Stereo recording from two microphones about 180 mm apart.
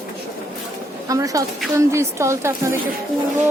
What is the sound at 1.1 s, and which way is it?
A woman's voice, 20° right (ahead or behind).